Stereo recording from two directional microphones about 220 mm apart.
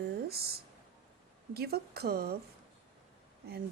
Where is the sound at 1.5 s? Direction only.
45° right (ahead or behind).